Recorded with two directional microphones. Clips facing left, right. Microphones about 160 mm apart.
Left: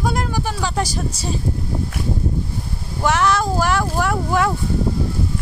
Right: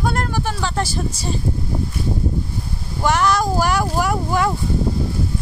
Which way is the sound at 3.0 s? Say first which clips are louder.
Even; centre (ahead or behind).